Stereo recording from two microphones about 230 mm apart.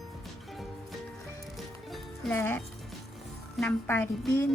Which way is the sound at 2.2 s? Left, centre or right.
Centre.